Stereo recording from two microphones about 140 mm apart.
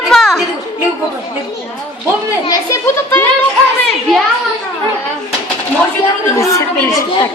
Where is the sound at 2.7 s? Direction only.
15° left (ahead or behind).